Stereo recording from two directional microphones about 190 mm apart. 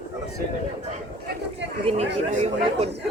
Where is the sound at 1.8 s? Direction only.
35° right (ahead or behind).